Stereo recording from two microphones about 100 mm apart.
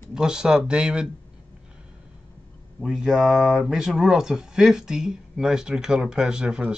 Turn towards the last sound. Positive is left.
turn(degrees=-5)  # may be behind; listen again after turning